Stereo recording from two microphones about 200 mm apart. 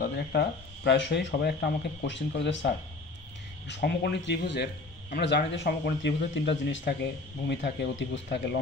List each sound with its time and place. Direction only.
0.1 s speech: 55° left (ahead or behind)